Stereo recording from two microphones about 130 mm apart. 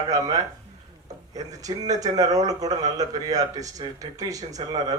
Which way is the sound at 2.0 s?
30° right (ahead or behind).